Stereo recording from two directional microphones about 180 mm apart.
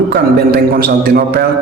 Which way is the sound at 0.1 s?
60° right (ahead or behind).